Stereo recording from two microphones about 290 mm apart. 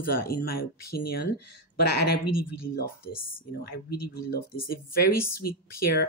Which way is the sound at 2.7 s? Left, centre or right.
Left.